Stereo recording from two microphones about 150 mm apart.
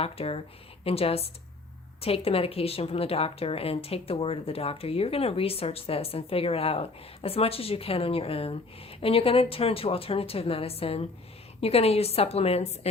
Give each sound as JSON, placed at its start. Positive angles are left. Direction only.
{"t": 0.0, "sound": "a woman's voice", "side_deg": 40}